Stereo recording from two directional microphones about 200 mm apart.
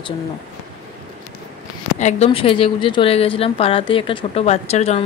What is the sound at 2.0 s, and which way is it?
A woman's voice, 30° left (ahead or behind).